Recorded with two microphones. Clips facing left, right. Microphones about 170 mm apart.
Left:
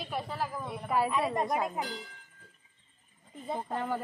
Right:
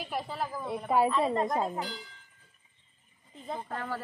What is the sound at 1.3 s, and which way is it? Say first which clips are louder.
Speech: right 1 dB; 15° left (ahead or behind).